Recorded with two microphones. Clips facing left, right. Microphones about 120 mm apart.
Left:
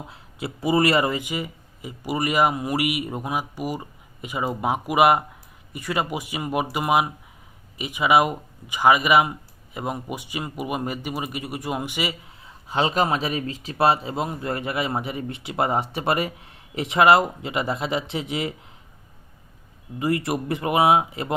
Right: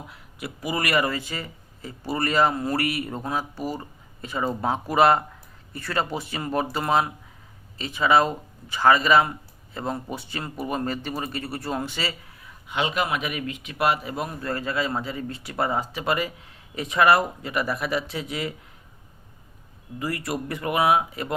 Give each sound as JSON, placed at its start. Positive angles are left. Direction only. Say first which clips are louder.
{"t": 0.1, "sound": "speech", "louder": "left 4 dB", "side_deg": 25}
{"t": 20.0, "sound": "speech", "louder": "left 5 dB", "side_deg": 25}